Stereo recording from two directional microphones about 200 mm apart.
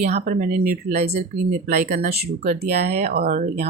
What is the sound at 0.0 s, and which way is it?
Speech, 35° right (ahead or behind).